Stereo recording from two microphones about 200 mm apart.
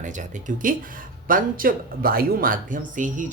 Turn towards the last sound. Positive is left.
turn(degrees=-40)  # may be behind; listen again after turning